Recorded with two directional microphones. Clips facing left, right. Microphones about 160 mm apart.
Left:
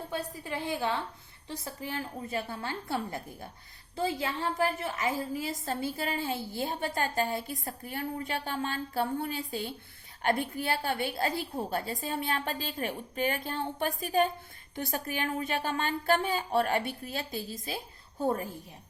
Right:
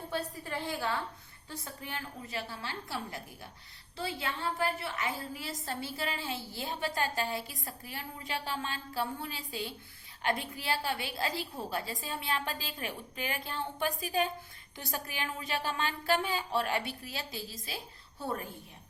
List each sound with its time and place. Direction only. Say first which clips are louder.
0.1 s a woman's voice: right 1 dB; 15° left (ahead or behind)
1.5 s a woman's voice: left 5 dB; 30° left (ahead or behind)
2.5 s a woman's voice: left 6 dB; 55° left (ahead or behind)
3.9 s a woman's voice: left 5 dB; 40° left (ahead or behind)